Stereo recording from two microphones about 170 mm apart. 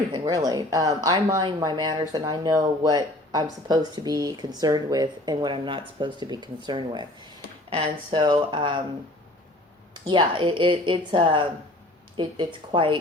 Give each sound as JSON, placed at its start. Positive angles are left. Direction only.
{"t": 0.1, "sound": "speech", "side_deg": -20}
{"t": 9.9, "sound": "speech", "side_deg": -25}